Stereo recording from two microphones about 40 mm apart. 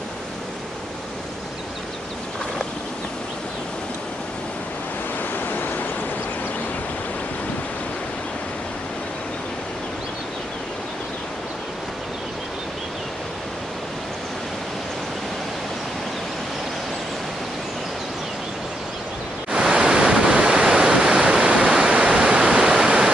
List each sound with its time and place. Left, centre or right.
5.3 s vehicle: left
19.5 s waves: centre
21.7 s pink noise: right
22.6 s waterfall: centre